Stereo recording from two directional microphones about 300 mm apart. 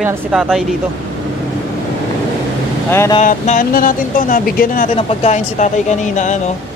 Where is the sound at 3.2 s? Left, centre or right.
Left.